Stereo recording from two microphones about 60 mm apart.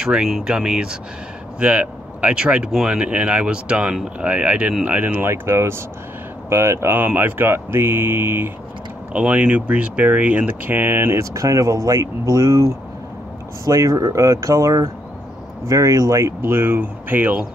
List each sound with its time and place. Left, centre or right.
0.0 s speech: centre; by 5.3 s right
5.3 s speech: right
7.0 s speech: right
9.1 s speech: right
11.1 s speech: right
15.7 s speech: right
16.3 s speech: right